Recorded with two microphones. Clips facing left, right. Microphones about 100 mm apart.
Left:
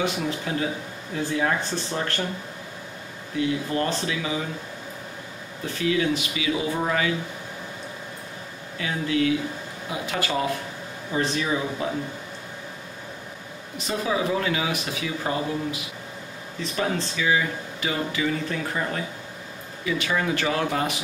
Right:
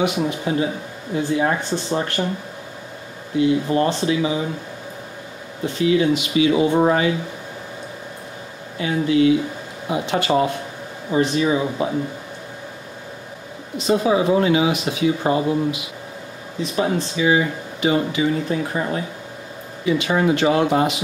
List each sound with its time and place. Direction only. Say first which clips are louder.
0.0 s speech: right 6 dB; 20° right (ahead or behind)
3.3 s speech: right 7 dB; 25° right (ahead or behind)
5.7 s speech: right 6 dB; 20° right (ahead or behind)
8.7 s speech: right 7 dB; 25° right (ahead or behind)
13.7 s speech: right 8 dB; 20° right (ahead or behind)